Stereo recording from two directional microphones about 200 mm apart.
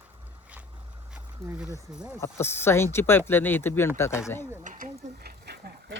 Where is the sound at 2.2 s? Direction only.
10° left (ahead or behind).